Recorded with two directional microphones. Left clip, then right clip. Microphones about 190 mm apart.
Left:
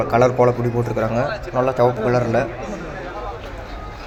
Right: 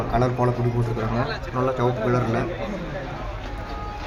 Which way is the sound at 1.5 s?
15° left (ahead or behind).